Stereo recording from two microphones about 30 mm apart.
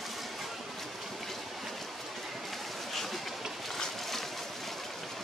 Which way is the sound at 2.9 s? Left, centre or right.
Centre.